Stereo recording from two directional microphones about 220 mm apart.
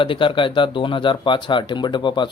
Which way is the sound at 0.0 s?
25° left (ahead or behind).